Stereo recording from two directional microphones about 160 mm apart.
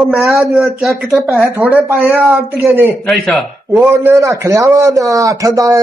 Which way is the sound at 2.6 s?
Centre (ahead or behind).